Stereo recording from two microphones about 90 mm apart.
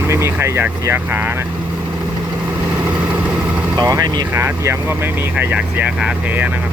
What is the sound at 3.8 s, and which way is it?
Speech, 45° right (ahead or behind).